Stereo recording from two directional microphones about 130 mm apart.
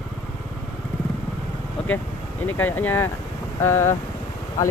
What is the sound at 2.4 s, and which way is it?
Speech, 15° left (ahead or behind).